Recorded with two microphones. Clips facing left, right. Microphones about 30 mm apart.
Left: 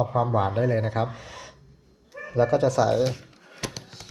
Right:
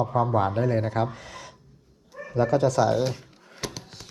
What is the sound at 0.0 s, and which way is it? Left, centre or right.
Speech, left.